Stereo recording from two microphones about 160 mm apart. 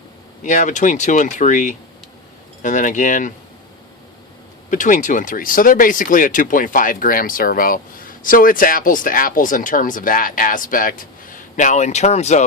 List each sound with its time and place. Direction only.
0.4 s speech: 50° left (ahead or behind)
4.7 s speech: 55° left (ahead or behind)